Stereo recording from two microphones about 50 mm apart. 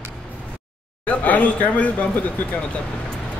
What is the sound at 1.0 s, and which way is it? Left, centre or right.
Speech, left.